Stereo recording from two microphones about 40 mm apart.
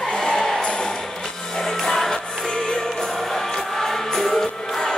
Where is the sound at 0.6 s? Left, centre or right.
Centre.